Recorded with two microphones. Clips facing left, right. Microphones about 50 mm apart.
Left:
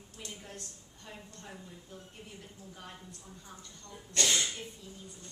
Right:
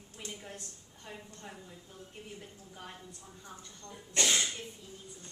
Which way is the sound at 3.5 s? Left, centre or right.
Centre.